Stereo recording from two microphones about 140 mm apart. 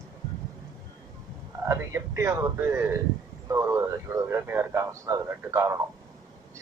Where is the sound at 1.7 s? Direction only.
20° right (ahead or behind).